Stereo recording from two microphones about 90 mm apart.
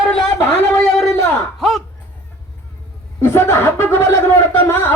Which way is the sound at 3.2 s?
25° left (ahead or behind).